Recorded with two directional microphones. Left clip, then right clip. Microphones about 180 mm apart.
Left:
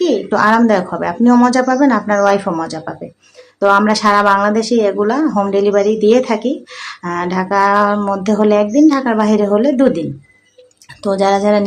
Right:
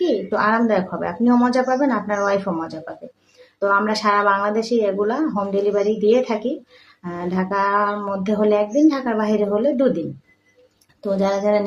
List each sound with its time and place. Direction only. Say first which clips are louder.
0.0 s speech: left 6 dB; 25° left (ahead or behind)
11.0 s speech: left 7 dB; 25° left (ahead or behind)